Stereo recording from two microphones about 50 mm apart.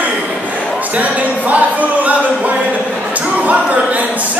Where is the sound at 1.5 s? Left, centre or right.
Right.